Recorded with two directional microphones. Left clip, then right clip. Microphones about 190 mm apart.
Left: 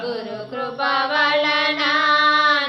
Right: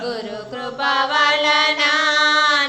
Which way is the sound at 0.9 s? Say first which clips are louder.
Right 2 dB; 35° right (ahead or behind).